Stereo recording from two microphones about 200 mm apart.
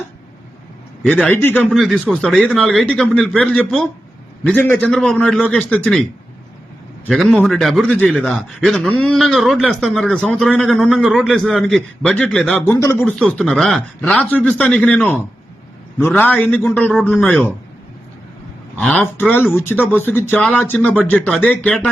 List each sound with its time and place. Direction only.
1.0 s speech: 5° left (ahead or behind)
1.7 s a man's voice: centre (ahead or behind)
18.8 s speech: 10° left (ahead or behind)